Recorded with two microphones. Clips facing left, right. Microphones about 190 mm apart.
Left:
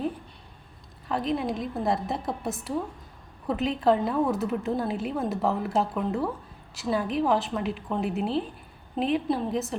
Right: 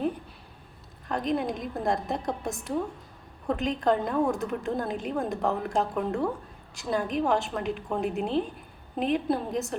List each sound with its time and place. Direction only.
1.0 s a woman's voice: centre (ahead or behind)